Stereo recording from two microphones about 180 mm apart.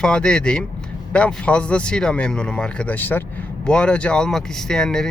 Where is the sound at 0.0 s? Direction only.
5° left (ahead or behind).